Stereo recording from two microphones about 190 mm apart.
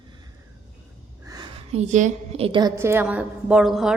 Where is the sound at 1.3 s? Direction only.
20° right (ahead or behind).